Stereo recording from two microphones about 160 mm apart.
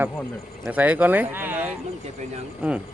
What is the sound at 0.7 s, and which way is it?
Speech, 10° right (ahead or behind).